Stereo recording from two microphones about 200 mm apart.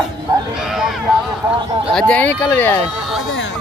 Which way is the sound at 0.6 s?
Centre (ahead or behind).